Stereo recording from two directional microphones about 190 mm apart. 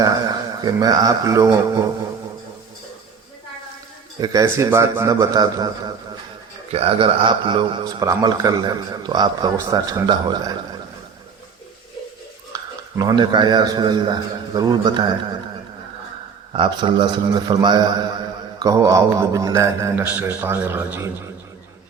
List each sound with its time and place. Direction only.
0.0 s a man's voice: 20° right (ahead or behind)
4.2 s a man's voice: 20° right (ahead or behind)
6.7 s a man's voice: 30° right (ahead or behind)
12.5 s a man's voice: 20° right (ahead or behind)
16.5 s a man's voice: 25° right (ahead or behind); by 21.1 s 10° right (ahead or behind)